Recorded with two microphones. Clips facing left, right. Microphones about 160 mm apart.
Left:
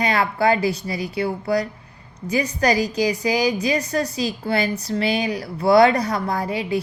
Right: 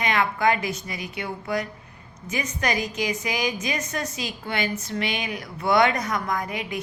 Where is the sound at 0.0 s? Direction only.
35° left (ahead or behind).